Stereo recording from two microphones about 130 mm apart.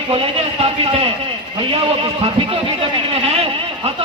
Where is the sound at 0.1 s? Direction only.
45° right (ahead or behind).